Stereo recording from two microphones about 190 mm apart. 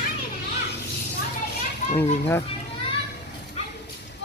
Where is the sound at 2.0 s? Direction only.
10° left (ahead or behind).